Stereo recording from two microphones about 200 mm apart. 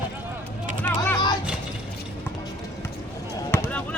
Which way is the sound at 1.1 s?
20° left (ahead or behind).